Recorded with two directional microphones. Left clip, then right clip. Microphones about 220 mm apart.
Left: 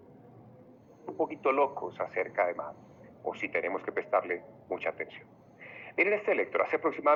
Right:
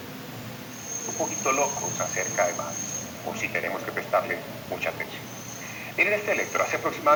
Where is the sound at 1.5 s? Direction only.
30° left (ahead or behind).